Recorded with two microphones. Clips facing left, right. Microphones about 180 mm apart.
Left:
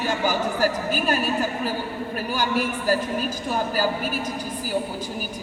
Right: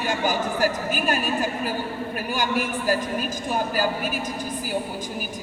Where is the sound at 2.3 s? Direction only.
15° right (ahead or behind).